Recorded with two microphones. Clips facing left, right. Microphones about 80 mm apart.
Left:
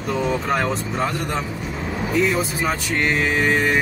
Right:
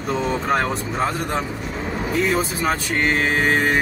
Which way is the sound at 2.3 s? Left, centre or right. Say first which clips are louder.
Right 1 dB; right.